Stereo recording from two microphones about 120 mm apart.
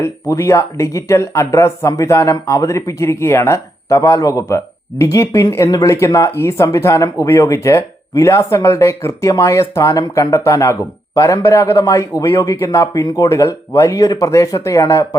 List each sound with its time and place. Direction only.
0.0 s speech: 25° left (ahead or behind)